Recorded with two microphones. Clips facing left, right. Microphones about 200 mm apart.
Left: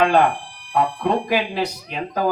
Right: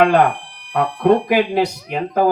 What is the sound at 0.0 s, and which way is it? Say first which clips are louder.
Speech: right 3 dB; 60° right (ahead or behind).